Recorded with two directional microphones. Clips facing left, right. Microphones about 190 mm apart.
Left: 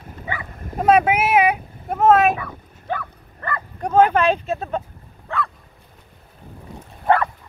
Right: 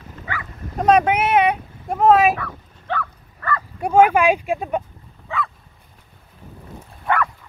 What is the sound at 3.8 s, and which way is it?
Speech, 10° right (ahead or behind).